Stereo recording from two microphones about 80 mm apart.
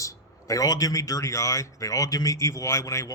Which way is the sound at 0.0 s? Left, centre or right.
Left.